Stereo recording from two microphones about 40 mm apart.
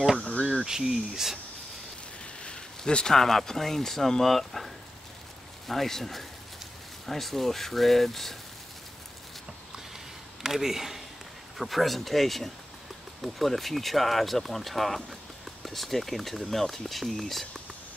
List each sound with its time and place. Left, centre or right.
0.7 s speech: centre
2.4 s a sound: left
3.2 s speech: centre
10.4 s speech: centre